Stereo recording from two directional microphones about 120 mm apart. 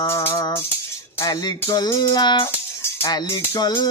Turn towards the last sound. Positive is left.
turn(degrees=35)  # may be behind; listen again after turning